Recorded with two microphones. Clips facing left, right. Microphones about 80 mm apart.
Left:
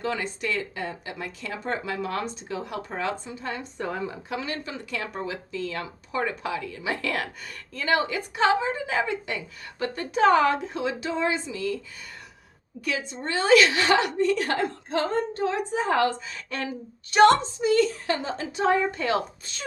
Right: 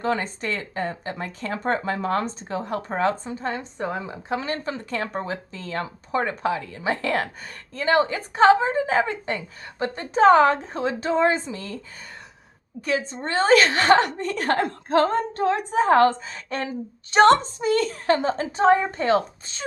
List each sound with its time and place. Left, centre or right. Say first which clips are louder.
0.0 s a woman's voice: right 4 dB; right
3.6 s a woman's voice: right 2 dB; right
12.8 s a woman's voice: right 4 dB; right